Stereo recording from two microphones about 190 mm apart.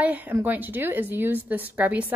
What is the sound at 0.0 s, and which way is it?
A woman's voice, 10° right (ahead or behind).